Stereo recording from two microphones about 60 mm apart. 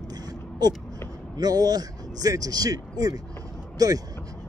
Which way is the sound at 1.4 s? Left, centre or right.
Right.